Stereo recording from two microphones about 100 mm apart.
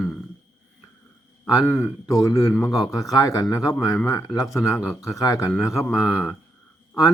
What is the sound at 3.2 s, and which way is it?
Speech, 35° left (ahead or behind).